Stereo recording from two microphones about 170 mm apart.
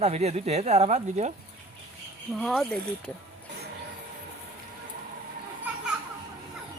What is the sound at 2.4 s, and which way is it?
Speech, 5° left (ahead or behind).